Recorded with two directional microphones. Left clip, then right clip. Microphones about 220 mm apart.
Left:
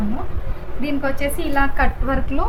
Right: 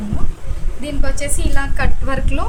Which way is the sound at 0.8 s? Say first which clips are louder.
Left 3 dB; 45° right (ahead or behind).